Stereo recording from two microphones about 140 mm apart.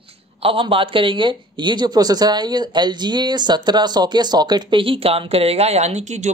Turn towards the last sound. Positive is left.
turn(degrees=-55)  # may be behind; listen again after turning